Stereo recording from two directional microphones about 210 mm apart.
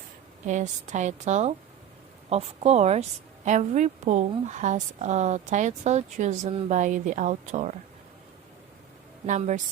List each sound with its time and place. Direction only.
0.4 s a woman's voice: 35° right (ahead or behind)
9.2 s a woman's voice: 35° right (ahead or behind)